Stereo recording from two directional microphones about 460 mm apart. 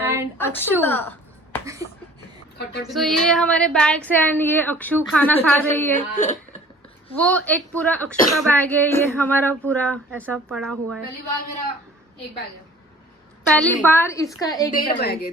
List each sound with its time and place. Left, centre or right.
0.0 s a sound: centre
0.3 s speech: centre
1.6 s a sound: centre
2.9 s speech: centre
6.1 s speech: centre
7.1 s speech: centre
13.5 s speech: centre
14.7 s a woman's voice: centre